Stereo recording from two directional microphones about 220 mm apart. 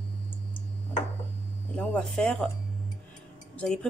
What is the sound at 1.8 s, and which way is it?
Speech, 5° left (ahead or behind).